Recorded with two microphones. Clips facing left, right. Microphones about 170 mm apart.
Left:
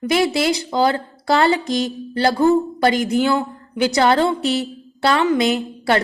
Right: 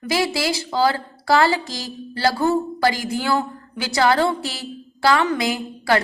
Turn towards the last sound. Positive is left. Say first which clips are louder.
# left 2 dB
turn(degrees=25)  # may be behind; listen again after turning